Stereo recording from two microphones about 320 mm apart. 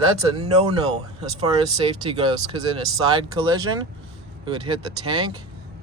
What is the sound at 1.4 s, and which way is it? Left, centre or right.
Speech, centre.